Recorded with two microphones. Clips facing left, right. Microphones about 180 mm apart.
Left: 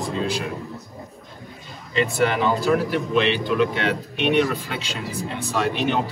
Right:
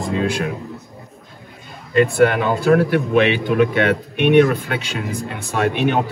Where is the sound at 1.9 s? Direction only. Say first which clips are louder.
Right 7 dB; 55° right (ahead or behind).